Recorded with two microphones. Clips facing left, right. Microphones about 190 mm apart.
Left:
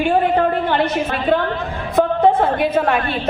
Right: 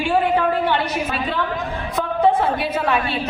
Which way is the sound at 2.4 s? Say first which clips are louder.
Left 4 dB; 50° left (ahead or behind).